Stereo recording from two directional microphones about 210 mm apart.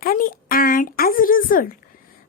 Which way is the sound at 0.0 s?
40° left (ahead or behind).